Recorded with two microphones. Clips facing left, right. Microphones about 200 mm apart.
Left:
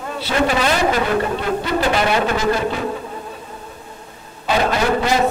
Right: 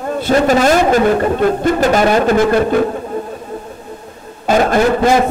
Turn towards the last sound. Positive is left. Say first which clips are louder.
# right 6 dB
turn(degrees=-50)  # may be behind; listen again after turning